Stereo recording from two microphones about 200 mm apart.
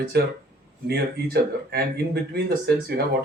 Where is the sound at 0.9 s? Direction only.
55° right (ahead or behind).